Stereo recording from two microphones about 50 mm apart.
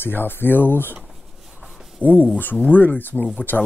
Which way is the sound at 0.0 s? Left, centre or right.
Left.